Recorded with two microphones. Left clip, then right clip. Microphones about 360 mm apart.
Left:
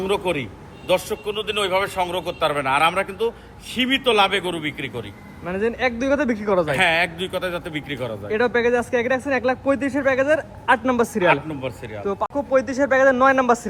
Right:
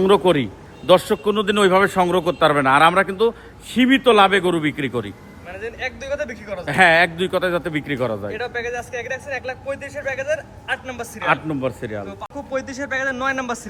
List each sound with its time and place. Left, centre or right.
0.0 s a man's voice: right
5.5 s a man's voice: centre
6.7 s a man's voice: right
8.3 s a man's voice: centre
11.3 s a man's voice: right
12.2 s a man's voice: centre